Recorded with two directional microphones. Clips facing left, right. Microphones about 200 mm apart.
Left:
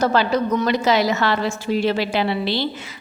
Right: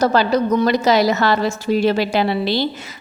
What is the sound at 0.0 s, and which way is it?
A woman's voice, 40° right (ahead or behind).